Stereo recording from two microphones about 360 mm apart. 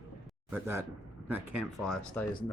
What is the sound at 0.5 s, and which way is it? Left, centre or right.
A man's voice, centre.